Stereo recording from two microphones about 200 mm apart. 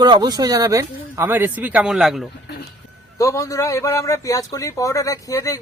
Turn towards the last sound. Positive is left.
turn(degrees=15)  # may be behind; listen again after turning